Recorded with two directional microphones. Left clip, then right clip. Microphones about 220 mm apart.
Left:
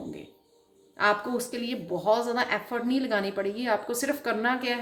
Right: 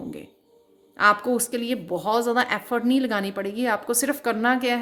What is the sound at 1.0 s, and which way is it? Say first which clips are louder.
A woman's voice: right 6 dB; 55° right (ahead or behind).